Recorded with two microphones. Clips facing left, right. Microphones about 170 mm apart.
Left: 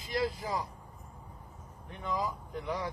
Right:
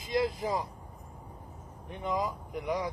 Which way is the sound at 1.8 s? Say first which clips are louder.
Right 3 dB; 20° right (ahead or behind).